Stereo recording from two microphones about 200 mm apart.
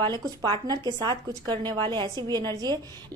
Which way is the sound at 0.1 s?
20° right (ahead or behind).